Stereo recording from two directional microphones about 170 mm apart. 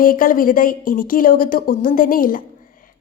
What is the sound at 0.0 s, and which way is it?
A woman's voice, 55° left (ahead or behind).